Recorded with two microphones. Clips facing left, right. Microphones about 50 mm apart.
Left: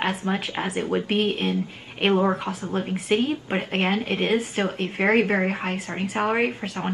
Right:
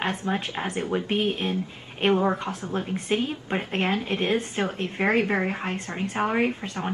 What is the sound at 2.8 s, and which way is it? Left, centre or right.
Speech, centre.